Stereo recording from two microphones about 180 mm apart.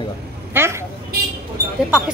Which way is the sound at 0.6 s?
10° right (ahead or behind).